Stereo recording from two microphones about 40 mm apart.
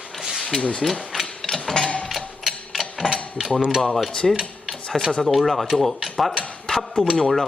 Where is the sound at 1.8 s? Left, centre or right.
Left.